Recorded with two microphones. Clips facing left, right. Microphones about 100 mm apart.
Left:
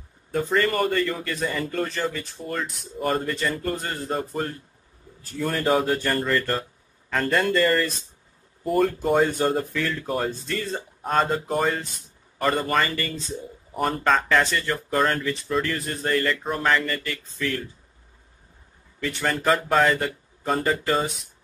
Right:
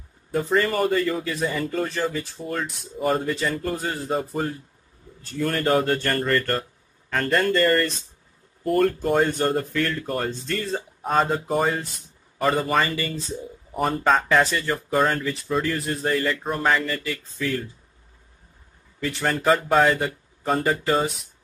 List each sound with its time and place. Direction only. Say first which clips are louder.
0.3 s a man's voice: right 1 dB; 5° right (ahead or behind)
18.9 s speech: right 1 dB; centre (ahead or behind)